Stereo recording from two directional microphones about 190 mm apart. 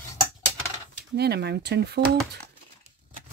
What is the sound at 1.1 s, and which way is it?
Speech, 60° right (ahead or behind).